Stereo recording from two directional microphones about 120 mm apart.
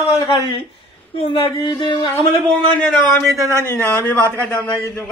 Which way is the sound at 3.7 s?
20° left (ahead or behind).